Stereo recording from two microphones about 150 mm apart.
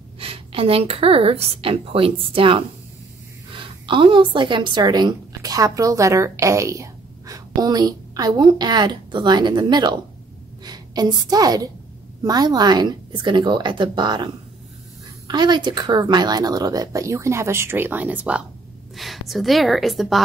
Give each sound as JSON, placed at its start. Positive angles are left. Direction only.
{"t": 0.2, "sound": "a woman's voice", "side_deg": -40}